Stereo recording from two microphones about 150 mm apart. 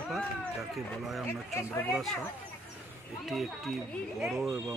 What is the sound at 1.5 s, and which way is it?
Speech, 15° left (ahead or behind).